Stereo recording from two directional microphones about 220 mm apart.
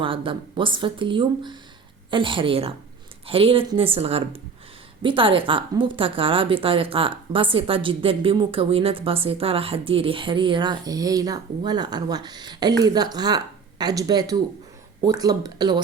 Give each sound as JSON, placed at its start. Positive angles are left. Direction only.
{"t": 0.0, "sound": "a woman's voice", "side_deg": -25}